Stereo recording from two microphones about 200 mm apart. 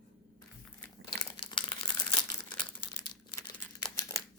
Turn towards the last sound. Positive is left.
turn(degrees=15)  # may be behind; listen again after turning